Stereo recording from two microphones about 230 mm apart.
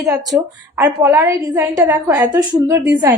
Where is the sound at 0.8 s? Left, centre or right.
Centre.